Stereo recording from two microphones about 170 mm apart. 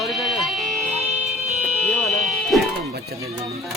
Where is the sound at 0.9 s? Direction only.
40° right (ahead or behind).